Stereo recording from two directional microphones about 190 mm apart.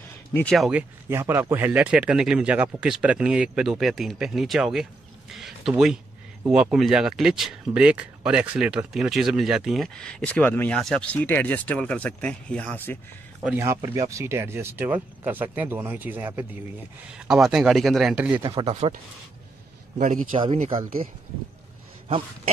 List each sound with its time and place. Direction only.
0.3 s speech: 5° left (ahead or behind)
13.4 s speech: 10° right (ahead or behind)
18.4 s speech: 25° right (ahead or behind)
20.0 s speech: 45° right (ahead or behind)